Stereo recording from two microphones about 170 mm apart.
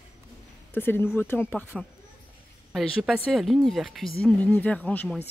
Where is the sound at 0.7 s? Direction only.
10° left (ahead or behind).